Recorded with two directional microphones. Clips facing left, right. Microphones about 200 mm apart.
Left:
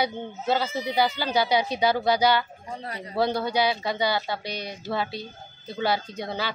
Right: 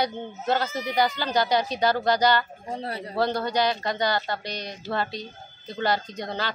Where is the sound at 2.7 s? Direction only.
30° right (ahead or behind).